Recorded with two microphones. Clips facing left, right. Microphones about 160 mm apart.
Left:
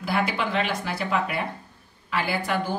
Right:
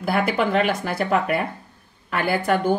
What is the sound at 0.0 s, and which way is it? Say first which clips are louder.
A woman's voice: right 5 dB; 55° right (ahead or behind).